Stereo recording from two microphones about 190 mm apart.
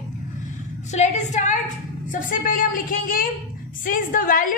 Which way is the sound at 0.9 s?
35° left (ahead or behind).